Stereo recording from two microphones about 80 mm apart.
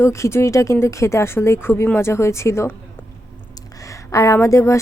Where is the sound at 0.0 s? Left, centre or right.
Left.